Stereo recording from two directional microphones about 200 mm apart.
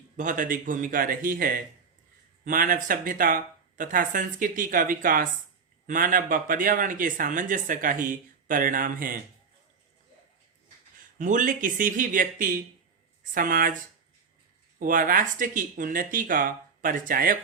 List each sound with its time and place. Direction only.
0.2 s speech: 40° right (ahead or behind)
11.2 s speech: 40° right (ahead or behind)
14.8 s speech: 40° right (ahead or behind)